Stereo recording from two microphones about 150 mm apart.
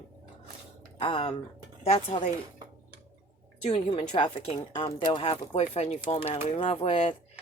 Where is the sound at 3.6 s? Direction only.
40° left (ahead or behind).